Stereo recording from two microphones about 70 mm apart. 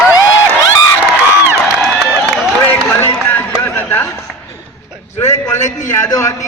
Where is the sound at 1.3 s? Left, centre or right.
Right.